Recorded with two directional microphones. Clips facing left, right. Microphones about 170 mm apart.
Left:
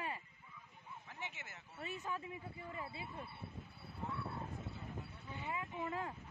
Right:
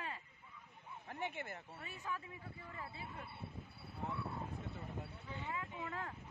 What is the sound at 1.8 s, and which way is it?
A man's voice, 20° left (ahead or behind).